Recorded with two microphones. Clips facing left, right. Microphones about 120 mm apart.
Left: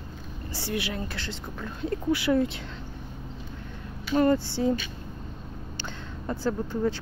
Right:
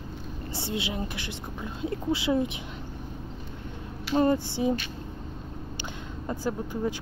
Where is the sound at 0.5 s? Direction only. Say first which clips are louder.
Left 1 dB; 20° right (ahead or behind).